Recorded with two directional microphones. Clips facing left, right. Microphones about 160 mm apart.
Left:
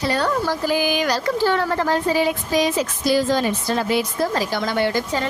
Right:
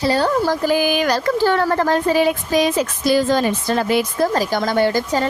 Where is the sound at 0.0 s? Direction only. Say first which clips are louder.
Right 4 dB; 35° right (ahead or behind).